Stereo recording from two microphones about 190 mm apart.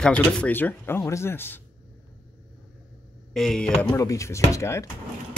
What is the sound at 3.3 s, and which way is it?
Speech, centre (ahead or behind).